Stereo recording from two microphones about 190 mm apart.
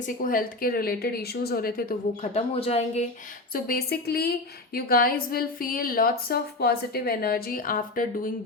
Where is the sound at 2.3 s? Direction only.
30° left (ahead or behind).